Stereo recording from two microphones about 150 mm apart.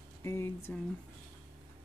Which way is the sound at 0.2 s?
15° left (ahead or behind).